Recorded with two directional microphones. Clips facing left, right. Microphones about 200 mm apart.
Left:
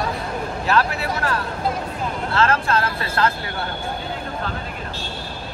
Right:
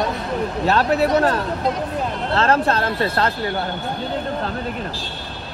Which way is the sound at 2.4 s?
35° right (ahead or behind).